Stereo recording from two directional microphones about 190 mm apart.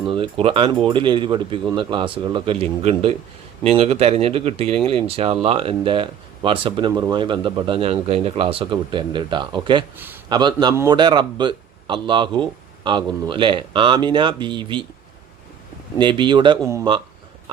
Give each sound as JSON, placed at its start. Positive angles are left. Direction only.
{"t": 0.1, "sound": "a man's voice", "side_deg": -30}
{"t": 16.0, "sound": "speech", "side_deg": -25}